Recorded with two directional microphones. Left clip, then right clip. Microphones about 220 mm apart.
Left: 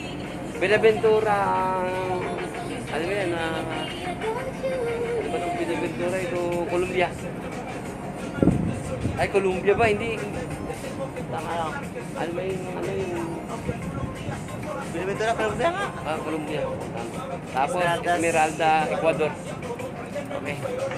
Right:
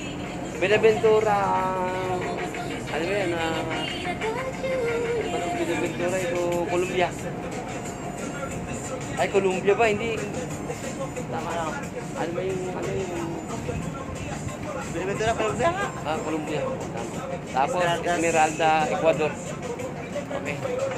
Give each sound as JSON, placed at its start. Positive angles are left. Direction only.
{"t": 0.6, "sound": "speech", "side_deg": 5}
{"t": 2.9, "sound": "speech", "side_deg": -5}
{"t": 6.7, "sound": "speech", "side_deg": 0}
{"t": 9.1, "sound": "speech", "side_deg": 0}
{"t": 15.0, "sound": "speech", "side_deg": 30}
{"t": 17.5, "sound": "speech", "side_deg": 0}
{"t": 17.8, "sound": "speech", "side_deg": 20}
{"t": 18.2, "sound": "speech", "side_deg": -5}